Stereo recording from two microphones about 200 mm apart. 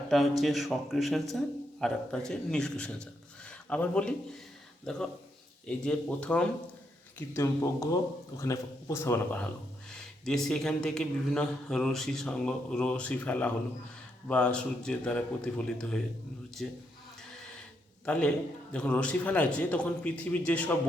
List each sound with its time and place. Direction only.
0.1 s a man's voice: centre (ahead or behind)
18.0 s a man's voice: 5° left (ahead or behind)